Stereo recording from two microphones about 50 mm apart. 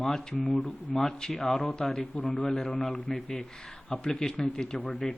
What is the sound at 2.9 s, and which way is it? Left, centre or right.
Speech, left.